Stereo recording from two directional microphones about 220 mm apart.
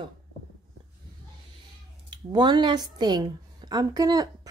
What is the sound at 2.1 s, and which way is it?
A woman's voice, 20° right (ahead or behind).